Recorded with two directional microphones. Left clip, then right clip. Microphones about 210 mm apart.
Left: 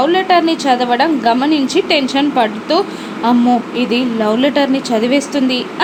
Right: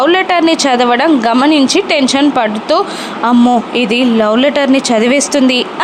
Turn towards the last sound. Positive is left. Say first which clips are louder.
# right 4 dB
turn(degrees=-20)  # may be behind; listen again after turning